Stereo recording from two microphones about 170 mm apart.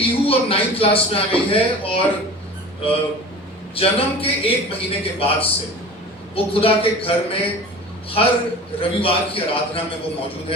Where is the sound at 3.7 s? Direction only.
35° left (ahead or behind).